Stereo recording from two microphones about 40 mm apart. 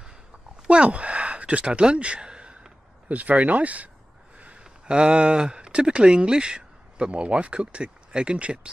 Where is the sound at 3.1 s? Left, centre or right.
Right.